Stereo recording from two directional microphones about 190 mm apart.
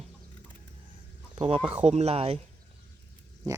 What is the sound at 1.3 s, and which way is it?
Speech, 30° right (ahead or behind).